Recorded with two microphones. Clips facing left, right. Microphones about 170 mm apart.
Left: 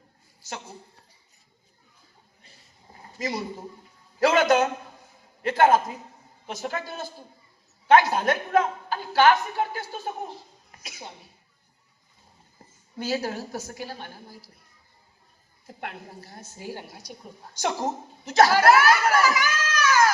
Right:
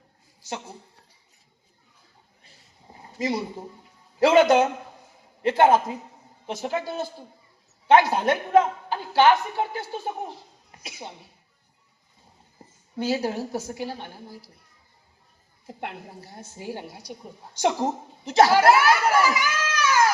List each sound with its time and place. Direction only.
3.2 s a woman's voice: 30° right (ahead or behind)
10.8 s a woman's voice: 30° right (ahead or behind)
13.0 s a woman's voice: 25° right (ahead or behind)
15.6 s a woman's voice: 25° right (ahead or behind)